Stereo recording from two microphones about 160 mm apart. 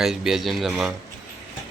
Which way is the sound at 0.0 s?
Centre (ahead or behind).